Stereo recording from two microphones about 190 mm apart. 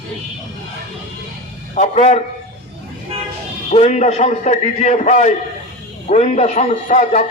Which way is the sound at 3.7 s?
35° left (ahead or behind).